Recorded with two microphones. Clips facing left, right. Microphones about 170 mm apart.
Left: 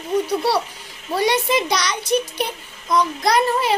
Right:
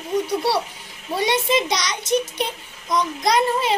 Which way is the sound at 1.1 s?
25° right (ahead or behind).